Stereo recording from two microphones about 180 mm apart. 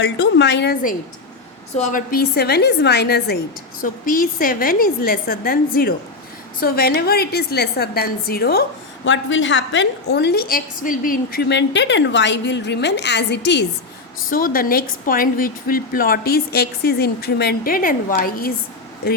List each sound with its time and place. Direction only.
0.0 s a woman's voice: 75° left (ahead or behind)
1.9 s a woman's voice: 50° left (ahead or behind)
3.8 s a woman's voice: 50° left (ahead or behind)
9.0 s a woman's voice: 90° left; by 13.7 s 75° left (ahead or behind)
14.3 s a woman's voice: 50° left (ahead or behind)